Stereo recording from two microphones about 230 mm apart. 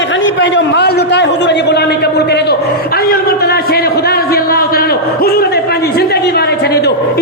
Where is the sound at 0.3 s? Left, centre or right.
Left.